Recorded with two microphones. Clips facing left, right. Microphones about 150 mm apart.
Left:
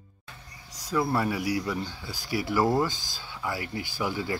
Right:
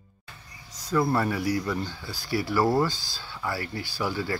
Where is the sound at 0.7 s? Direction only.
10° left (ahead or behind).